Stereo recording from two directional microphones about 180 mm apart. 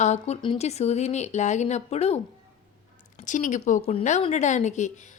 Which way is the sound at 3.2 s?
45° left (ahead or behind).